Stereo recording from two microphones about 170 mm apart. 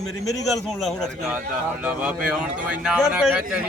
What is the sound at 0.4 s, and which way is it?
A man's voice, centre (ahead or behind).